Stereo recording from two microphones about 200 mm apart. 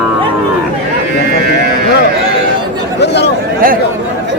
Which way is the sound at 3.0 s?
55° left (ahead or behind).